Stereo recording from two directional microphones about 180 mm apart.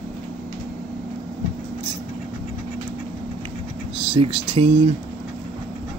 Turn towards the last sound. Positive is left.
turn(degrees=-35)  # may be behind; listen again after turning